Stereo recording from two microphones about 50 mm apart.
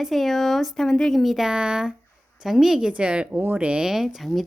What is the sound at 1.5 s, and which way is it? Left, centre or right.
Speech, centre.